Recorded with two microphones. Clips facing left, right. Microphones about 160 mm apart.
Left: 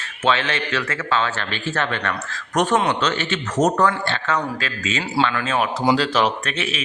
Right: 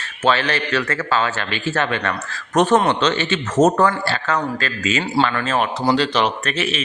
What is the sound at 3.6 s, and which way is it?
Speech, 25° right (ahead or behind).